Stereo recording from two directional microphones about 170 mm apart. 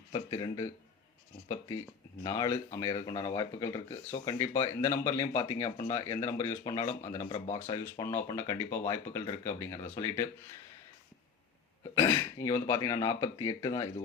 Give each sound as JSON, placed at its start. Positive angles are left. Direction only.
{"t": 0.1, "sound": "speech", "side_deg": 25}
{"t": 11.9, "sound": "speech", "side_deg": 15}